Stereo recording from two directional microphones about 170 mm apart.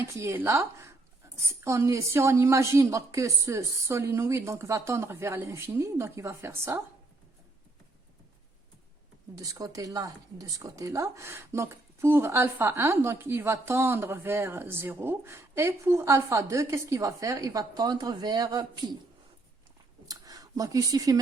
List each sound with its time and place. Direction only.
0.0 s a woman's voice: 15° right (ahead or behind)
9.4 s speech: 20° right (ahead or behind)
20.1 s speech: 20° right (ahead or behind)